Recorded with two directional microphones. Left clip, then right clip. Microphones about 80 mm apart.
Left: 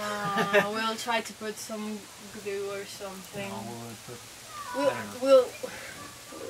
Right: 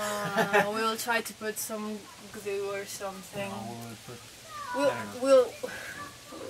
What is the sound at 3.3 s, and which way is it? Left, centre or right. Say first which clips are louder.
Speech: right 1 dB; left.